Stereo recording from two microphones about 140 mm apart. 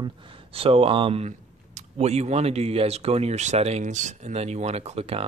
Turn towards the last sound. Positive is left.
turn(degrees=-45)  # may be behind; listen again after turning